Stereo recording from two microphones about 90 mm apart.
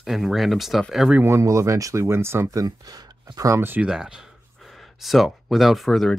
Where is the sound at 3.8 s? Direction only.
10° right (ahead or behind).